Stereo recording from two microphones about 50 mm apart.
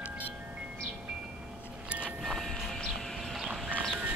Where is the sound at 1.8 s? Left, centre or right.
Right.